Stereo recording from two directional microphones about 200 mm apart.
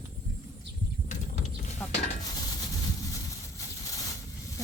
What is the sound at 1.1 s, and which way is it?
Mechanisms, 35° left (ahead or behind).